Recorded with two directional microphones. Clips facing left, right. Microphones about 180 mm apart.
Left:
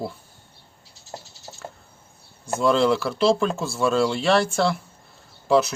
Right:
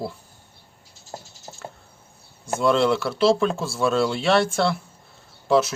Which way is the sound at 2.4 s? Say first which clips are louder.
Even; centre (ahead or behind).